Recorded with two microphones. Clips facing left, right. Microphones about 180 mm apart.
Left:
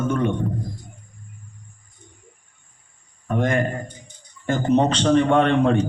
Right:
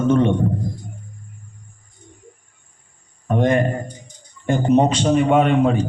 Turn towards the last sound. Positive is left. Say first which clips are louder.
# right 1 dB
turn(degrees=-5)  # may be behind; listen again after turning